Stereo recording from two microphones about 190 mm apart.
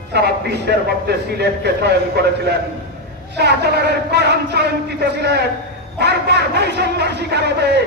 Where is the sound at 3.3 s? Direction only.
60° right (ahead or behind).